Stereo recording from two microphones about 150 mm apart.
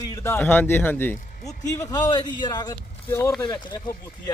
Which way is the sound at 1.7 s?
25° left (ahead or behind).